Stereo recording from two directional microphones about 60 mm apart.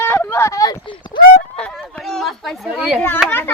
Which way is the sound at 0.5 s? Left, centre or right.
Left.